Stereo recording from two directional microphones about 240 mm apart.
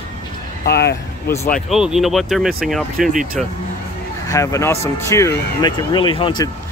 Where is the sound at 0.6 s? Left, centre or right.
Left.